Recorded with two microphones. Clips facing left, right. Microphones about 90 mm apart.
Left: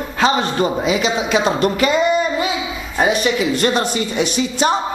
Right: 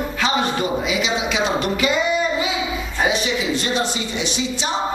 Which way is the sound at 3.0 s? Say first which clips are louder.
Left 5 dB; 55° left (ahead or behind).